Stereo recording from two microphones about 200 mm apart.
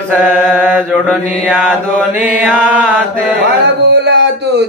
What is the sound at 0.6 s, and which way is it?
Mantra, 10° right (ahead or behind).